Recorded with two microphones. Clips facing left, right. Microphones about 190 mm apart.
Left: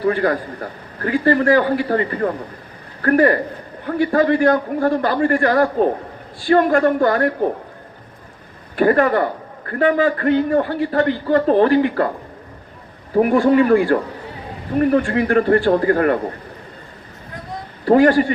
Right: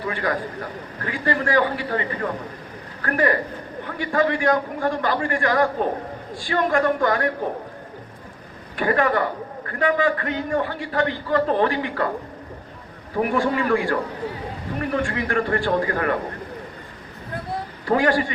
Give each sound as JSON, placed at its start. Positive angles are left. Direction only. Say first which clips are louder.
{"t": 0.1, "sound": "a man's voice", "louder": "left 3 dB", "side_deg": 35}
{"t": 8.7, "sound": "a man's voice", "louder": "left 6 dB", "side_deg": 40}
{"t": 13.3, "sound": "a man's voice", "louder": "left 8 dB", "side_deg": 35}
{"t": 17.8, "sound": "a man's voice", "louder": "left 8 dB", "side_deg": 35}